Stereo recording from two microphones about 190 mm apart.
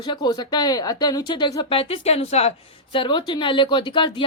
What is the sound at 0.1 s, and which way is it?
A woman's voice, 20° left (ahead or behind).